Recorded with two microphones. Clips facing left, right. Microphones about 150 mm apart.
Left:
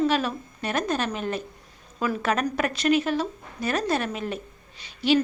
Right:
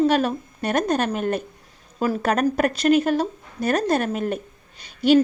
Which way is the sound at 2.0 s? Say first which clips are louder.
Right 4 dB; 40° right (ahead or behind).